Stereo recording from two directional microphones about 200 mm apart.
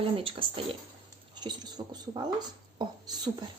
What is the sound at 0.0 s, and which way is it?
Speech, 25° right (ahead or behind).